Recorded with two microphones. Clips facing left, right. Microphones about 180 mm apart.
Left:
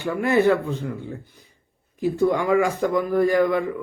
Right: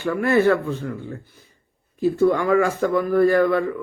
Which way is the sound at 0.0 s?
15° left (ahead or behind).